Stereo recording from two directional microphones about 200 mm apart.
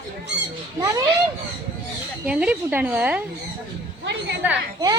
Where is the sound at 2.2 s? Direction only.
5° right (ahead or behind).